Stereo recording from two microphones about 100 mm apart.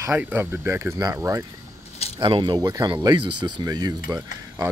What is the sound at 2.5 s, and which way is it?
Speech, 40° right (ahead or behind).